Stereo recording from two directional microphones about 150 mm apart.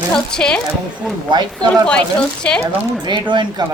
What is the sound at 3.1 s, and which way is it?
Speech, 30° right (ahead or behind).